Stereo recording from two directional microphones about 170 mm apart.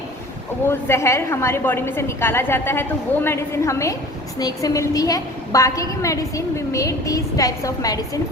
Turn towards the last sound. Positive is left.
turn(degrees=20)  # may be behind; listen again after turning